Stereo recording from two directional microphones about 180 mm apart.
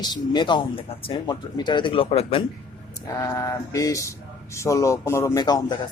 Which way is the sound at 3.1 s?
20° left (ahead or behind).